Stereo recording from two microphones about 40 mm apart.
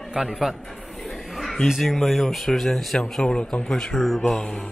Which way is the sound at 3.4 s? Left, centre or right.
Left.